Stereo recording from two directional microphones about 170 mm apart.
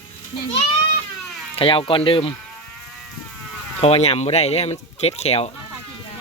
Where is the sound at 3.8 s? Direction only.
35° left (ahead or behind).